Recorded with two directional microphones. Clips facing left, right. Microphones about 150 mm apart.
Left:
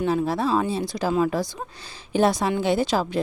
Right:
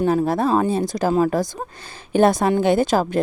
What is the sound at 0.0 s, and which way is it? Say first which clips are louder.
Speech: right 4 dB; 45° right (ahead or behind).